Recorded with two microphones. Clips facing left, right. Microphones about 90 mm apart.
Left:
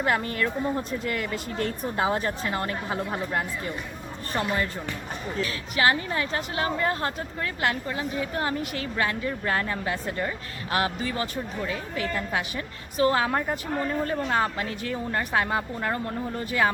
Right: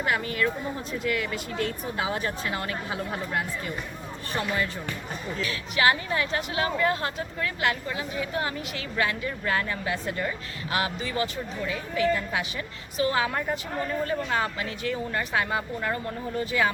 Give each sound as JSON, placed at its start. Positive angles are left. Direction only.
{"t": 0.0, "sound": "a woman's voice", "side_deg": 40}
{"t": 10.7, "sound": "a woman's voice", "side_deg": 45}